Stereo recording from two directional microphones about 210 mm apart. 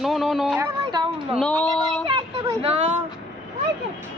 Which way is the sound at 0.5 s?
20° right (ahead or behind).